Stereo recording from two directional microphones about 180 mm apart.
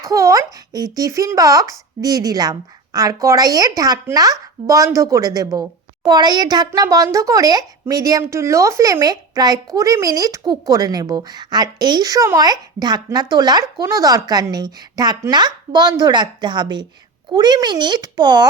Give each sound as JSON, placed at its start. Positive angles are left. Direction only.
{"t": 0.0, "sound": "a child's voice", "side_deg": -20}